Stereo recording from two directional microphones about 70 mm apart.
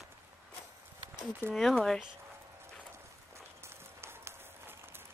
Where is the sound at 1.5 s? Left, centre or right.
Centre.